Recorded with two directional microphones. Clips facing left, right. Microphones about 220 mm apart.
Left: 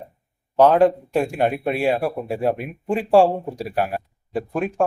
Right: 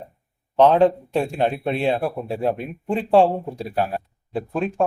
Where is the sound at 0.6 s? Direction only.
10° left (ahead or behind).